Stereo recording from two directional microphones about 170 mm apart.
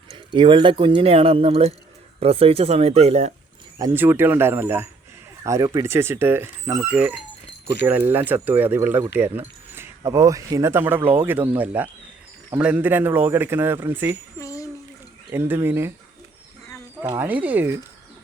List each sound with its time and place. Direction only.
0.3 s speech: 30° right (ahead or behind)
3.8 s speech: 15° right (ahead or behind)
14.3 s a sound: 20° left (ahead or behind)
15.3 s speech: 15° right (ahead or behind)
17.2 s speech: 10° right (ahead or behind)